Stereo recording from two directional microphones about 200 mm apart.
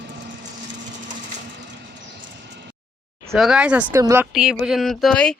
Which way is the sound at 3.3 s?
Centre (ahead or behind).